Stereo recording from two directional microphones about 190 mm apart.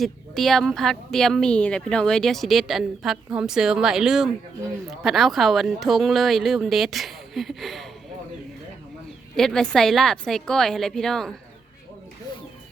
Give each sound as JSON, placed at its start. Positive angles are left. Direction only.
{"t": 0.0, "sound": "speech", "side_deg": 0}
{"t": 9.3, "sound": "speech", "side_deg": 5}